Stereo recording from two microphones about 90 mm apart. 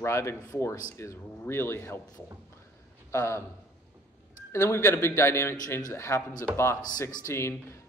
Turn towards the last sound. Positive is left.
turn(degrees=30)  # may be behind; listen again after turning